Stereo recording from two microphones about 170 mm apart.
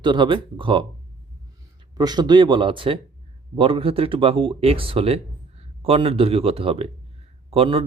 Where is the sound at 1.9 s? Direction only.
25° right (ahead or behind).